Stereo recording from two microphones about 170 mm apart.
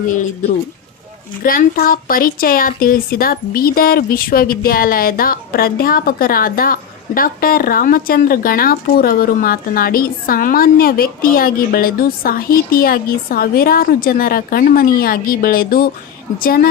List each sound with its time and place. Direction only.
1.5 s a woman's voice: 55° left (ahead or behind)